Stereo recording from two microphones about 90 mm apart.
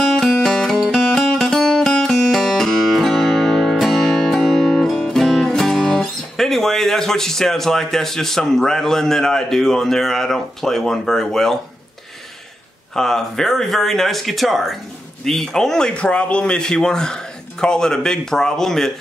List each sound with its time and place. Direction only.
0.0 s music: 5° left (ahead or behind)
12.9 s speech: 5° left (ahead or behind)